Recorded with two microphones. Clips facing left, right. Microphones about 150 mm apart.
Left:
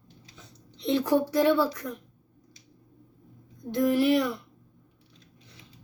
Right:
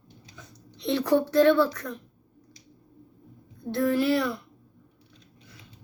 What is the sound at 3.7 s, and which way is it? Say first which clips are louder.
Speech: left 1 dB; 15° left (ahead or behind).